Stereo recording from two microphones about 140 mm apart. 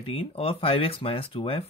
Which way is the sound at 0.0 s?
45° left (ahead or behind).